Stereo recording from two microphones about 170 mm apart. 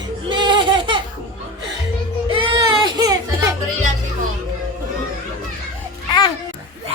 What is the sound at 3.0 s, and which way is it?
Children playing, 20° right (ahead or behind).